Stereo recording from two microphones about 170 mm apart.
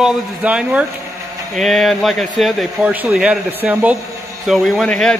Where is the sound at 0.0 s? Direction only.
5° right (ahead or behind).